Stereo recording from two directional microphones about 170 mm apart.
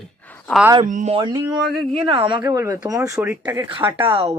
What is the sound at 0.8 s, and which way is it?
Speech, 45° right (ahead or behind).